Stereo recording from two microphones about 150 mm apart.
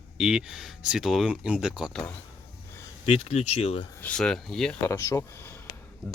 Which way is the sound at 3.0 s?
45° left (ahead or behind).